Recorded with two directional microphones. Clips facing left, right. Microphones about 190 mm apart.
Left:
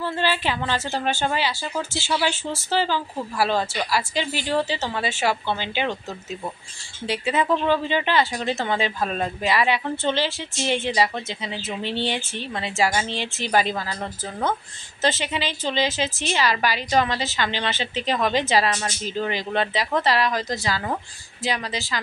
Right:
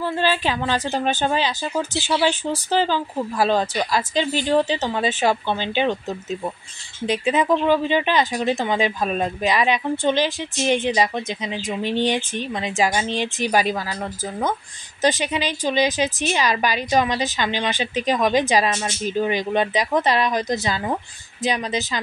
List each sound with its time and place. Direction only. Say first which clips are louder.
0.0 s speech: right 3 dB; 15° right (ahead or behind)
15.0 s speech: right 3 dB; 15° right (ahead or behind)